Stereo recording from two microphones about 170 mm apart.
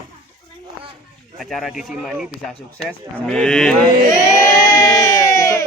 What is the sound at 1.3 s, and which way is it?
Speech, centre (ahead or behind).